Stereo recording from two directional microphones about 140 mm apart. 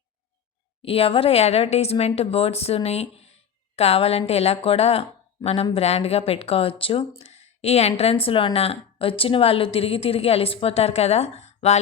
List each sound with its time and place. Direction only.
0.8 s speech: 45° left (ahead or behind)